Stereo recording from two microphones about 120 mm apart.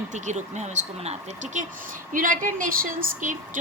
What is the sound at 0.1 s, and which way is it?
A woman's voice, 80° right.